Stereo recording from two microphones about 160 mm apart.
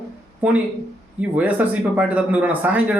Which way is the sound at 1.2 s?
10° right (ahead or behind).